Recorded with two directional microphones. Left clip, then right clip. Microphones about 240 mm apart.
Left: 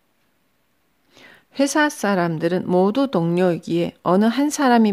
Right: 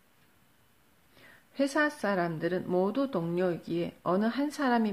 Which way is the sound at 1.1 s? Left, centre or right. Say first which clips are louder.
Left 10 dB; left.